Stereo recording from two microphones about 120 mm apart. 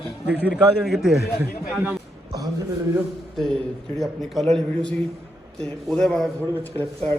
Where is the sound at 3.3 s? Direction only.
Centre (ahead or behind).